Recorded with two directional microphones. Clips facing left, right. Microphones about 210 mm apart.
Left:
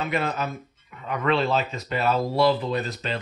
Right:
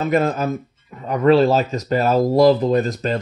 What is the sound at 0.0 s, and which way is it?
Speech, 45° right (ahead or behind).